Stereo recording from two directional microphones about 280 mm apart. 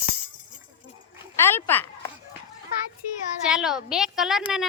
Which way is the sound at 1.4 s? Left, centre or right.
Centre.